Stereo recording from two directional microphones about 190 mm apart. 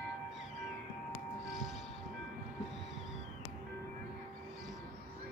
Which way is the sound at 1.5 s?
Centre (ahead or behind).